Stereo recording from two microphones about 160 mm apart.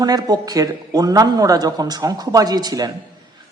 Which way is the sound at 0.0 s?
25° right (ahead or behind).